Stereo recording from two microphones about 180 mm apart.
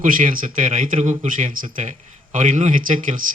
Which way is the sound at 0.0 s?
50° right (ahead or behind).